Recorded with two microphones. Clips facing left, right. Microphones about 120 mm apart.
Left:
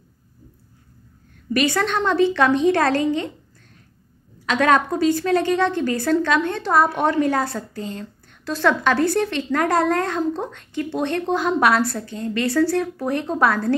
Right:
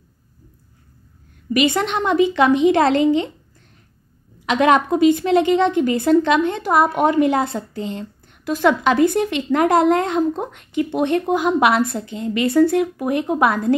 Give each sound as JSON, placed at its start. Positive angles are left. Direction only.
{"t": 1.5, "sound": "a woman's voice", "side_deg": -15}
{"t": 4.5, "sound": "a woman's voice", "side_deg": -15}